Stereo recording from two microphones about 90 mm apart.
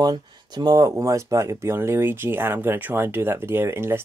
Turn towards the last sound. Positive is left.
turn(degrees=-30)  # may be behind; listen again after turning